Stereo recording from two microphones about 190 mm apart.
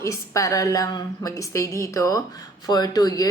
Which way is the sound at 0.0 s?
15° left (ahead or behind).